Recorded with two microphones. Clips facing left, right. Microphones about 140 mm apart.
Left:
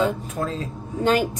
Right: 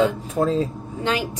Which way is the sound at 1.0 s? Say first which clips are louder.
Left 4 dB; 50° left (ahead or behind).